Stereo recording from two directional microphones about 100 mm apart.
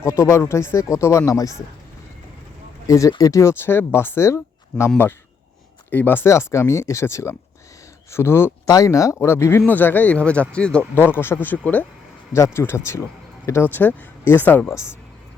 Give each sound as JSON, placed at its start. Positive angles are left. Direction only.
{"t": 0.0, "sound": "speech", "side_deg": 30}
{"t": 2.8, "sound": "speech", "side_deg": 30}
{"t": 5.9, "sound": "speech", "side_deg": 20}
{"t": 10.9, "sound": "speech", "side_deg": 25}